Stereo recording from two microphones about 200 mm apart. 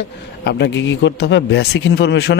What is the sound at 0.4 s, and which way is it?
Speech, 60° left (ahead or behind).